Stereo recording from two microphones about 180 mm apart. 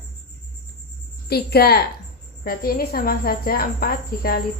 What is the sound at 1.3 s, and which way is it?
A woman's voice, 60° left (ahead or behind).